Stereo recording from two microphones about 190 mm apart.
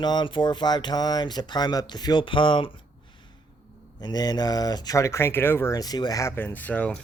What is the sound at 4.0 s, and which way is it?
Speech, 20° left (ahead or behind).